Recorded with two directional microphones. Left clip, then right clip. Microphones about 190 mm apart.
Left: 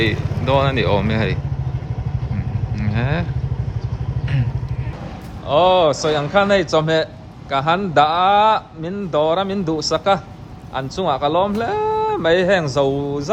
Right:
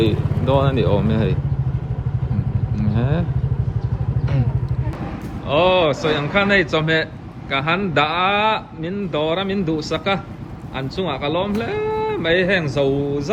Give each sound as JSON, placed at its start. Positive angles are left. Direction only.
{"t": 0.4, "sound": "speech", "side_deg": 25}
{"t": 2.9, "sound": "vehicle", "side_deg": 20}
{"t": 5.5, "sound": "a man's voice", "side_deg": 10}
{"t": 12.9, "sound": "speech", "side_deg": 40}